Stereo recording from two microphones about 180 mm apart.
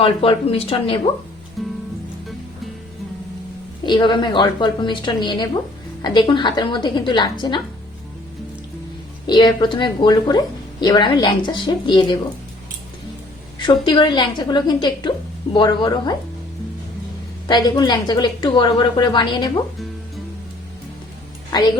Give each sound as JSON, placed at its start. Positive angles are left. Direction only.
{"t": 0.0, "sound": "speech", "side_deg": 30}
{"t": 1.6, "sound": "music", "side_deg": 0}
{"t": 3.8, "sound": "speech", "side_deg": 25}
{"t": 9.2, "sound": "speech", "side_deg": 25}
{"t": 13.6, "sound": "speech", "side_deg": 25}
{"t": 17.5, "sound": "speech", "side_deg": 25}
{"t": 21.5, "sound": "speech", "side_deg": 25}